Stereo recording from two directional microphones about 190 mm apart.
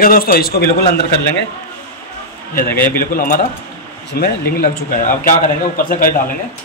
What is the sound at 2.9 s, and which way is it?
Speech, 45° left (ahead or behind).